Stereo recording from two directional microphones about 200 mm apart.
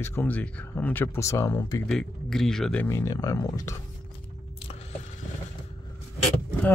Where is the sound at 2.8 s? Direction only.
15° left (ahead or behind).